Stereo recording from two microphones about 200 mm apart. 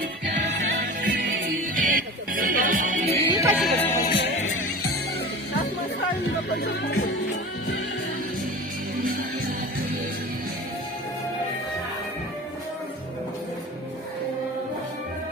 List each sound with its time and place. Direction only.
1.7 s music: 45° right (ahead or behind)
3.2 s music: 15° right (ahead or behind)
3.6 s music: centre (ahead or behind)
3.8 s music: 15° left (ahead or behind)
6.6 s music: 50° left (ahead or behind)